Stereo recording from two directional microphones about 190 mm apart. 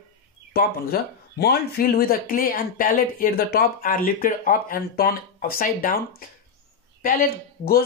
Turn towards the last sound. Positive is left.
turn(degrees=50)  # may be behind; listen again after turning